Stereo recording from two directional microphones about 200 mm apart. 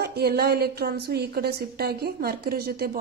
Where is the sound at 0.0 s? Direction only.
50° right (ahead or behind).